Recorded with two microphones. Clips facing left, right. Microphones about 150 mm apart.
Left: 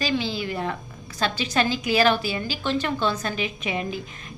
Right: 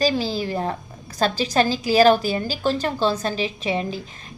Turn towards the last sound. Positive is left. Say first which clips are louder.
# right 3 dB
turn(degrees=-35)  # may be behind; listen again after turning